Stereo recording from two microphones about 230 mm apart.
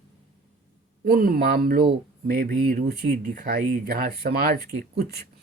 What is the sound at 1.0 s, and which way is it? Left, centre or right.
Speech, right.